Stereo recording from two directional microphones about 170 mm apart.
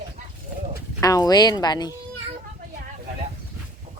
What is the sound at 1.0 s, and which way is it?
Speech, 20° left (ahead or behind).